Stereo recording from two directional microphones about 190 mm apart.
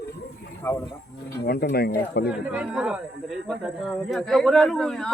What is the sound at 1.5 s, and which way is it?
Speech, 55° left (ahead or behind).